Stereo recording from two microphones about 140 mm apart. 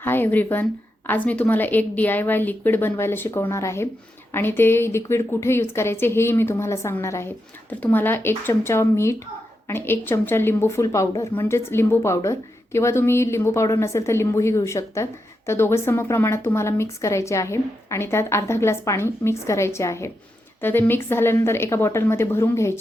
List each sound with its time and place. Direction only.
0.0 s a woman's voice: 15° left (ahead or behind)